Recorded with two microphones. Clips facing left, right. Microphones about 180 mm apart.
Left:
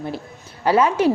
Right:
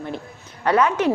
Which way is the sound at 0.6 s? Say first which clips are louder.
Left 1 dB; 30° left (ahead or behind).